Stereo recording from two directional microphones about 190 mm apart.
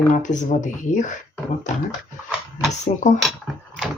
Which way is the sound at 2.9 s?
35° left (ahead or behind).